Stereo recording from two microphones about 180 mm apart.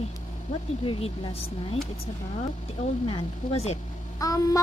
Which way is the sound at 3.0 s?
35° left (ahead or behind).